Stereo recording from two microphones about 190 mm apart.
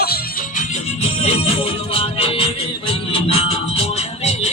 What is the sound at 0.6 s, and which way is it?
Music, 35° left (ahead or behind).